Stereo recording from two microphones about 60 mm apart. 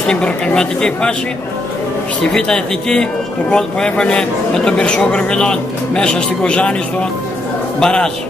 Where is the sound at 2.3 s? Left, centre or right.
Centre.